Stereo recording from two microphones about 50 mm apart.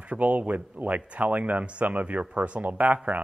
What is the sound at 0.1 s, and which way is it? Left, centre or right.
Speech, right.